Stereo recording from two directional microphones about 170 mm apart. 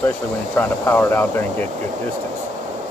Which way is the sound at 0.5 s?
10° left (ahead or behind).